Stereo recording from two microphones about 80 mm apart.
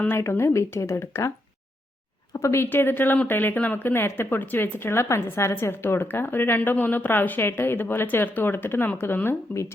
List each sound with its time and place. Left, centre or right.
0.2 s speech: left
2.3 s speech: left